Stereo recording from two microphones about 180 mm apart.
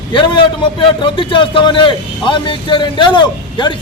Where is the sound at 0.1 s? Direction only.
25° left (ahead or behind).